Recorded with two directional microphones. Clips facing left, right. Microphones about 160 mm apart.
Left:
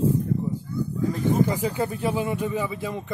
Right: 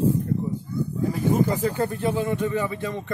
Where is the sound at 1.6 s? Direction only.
10° left (ahead or behind).